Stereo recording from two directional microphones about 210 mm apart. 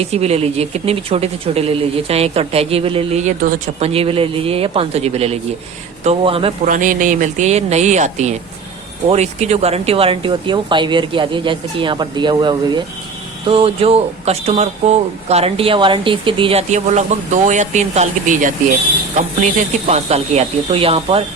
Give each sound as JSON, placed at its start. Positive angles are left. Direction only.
{"t": 0.0, "sound": "speech", "side_deg": -30}
{"t": 6.7, "sound": "speech", "side_deg": -40}
{"t": 19.9, "sound": "speech", "side_deg": -30}